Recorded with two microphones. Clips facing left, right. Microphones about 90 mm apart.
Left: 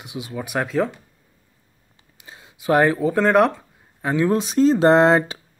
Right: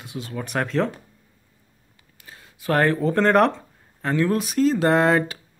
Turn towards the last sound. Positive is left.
turn(degrees=25)  # may be behind; listen again after turning